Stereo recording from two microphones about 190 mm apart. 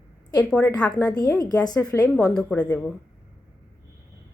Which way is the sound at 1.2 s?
20° left (ahead or behind).